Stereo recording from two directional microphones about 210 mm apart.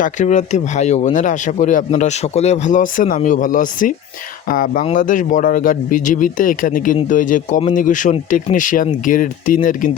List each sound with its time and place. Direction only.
0.0 s speech: 35° left (ahead or behind)